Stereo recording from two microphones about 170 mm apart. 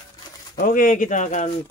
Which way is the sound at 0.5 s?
55° left (ahead or behind).